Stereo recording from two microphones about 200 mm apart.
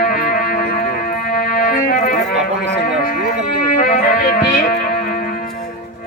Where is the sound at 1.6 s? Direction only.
40° left (ahead or behind).